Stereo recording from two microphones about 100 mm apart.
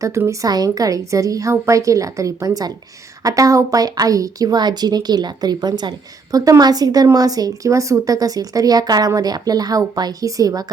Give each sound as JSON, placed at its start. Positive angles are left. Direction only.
{"t": 0.3, "sound": "a woman's voice", "side_deg": -40}